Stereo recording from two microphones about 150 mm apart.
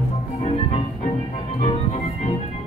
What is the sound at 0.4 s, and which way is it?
Music, 45° left (ahead or behind).